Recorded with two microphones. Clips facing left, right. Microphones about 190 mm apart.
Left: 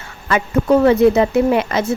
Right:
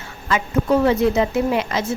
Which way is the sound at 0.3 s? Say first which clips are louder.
Left 4 dB; 60° left (ahead or behind).